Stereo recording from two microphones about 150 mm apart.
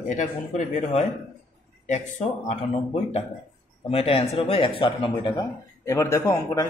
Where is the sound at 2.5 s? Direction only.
45° left (ahead or behind).